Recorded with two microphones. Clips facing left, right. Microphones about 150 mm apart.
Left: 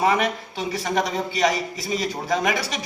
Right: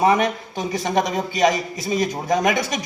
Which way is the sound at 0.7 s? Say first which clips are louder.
Right 3 dB; 20° right (ahead or behind).